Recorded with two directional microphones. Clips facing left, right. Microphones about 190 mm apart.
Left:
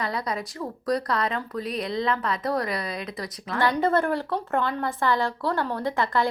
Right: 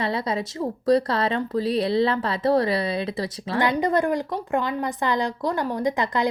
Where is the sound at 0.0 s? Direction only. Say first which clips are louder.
Right 4 dB; 25° right (ahead or behind).